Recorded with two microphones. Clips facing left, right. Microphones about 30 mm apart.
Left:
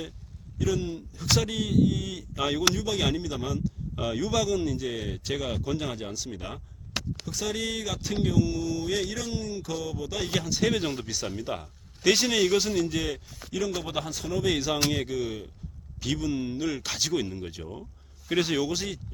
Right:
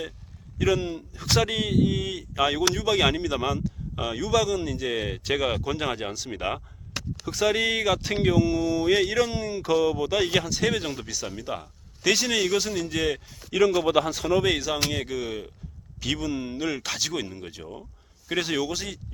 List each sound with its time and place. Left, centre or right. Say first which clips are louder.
0.8 s speech: right 2 dB; right
2.8 s speech: right 5 dB; right
4.2 s speech: right 3 dB; centre
4.8 s speech: right 4 dB; right
6.3 s speech: right 9 dB; right
8.4 s speech: right 4 dB; right
8.8 s speech: right 8 dB; right
9.3 s speech: right 3 dB; right
9.6 s speech: right 10 dB; right
10.4 s speech: even; centre
13.5 s speech: right 9 dB; right
14.8 s speech: even; centre
16.3 s speech: right 1 dB; centre